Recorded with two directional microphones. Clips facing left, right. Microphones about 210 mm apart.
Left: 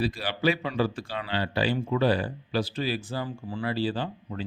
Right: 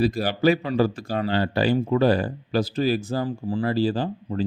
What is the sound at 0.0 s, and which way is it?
Speech, 40° right (ahead or behind).